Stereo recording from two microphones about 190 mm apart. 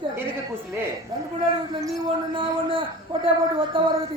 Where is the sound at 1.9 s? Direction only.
30° right (ahead or behind).